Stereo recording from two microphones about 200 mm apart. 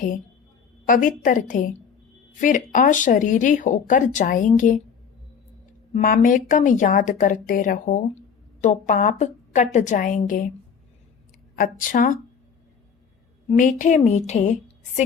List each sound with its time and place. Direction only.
0.9 s speech: 40° left (ahead or behind)
5.9 s a woman's voice: 40° left (ahead or behind)
11.5 s a woman's voice: 45° left (ahead or behind)
13.5 s speech: 40° left (ahead or behind)